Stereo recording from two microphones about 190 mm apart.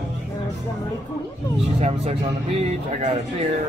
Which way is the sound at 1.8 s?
35° right (ahead or behind).